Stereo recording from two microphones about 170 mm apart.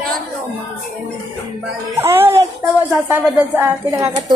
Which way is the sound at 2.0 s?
15° right (ahead or behind).